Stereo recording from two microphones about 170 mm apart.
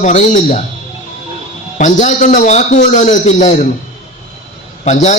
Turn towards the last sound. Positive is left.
turn(degrees=45)  # may be behind; listen again after turning